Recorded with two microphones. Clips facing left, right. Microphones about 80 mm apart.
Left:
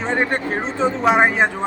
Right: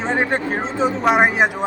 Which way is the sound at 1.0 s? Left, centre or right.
Centre.